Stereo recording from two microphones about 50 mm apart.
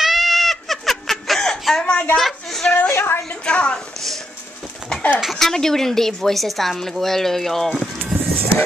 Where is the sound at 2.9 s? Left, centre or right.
Left.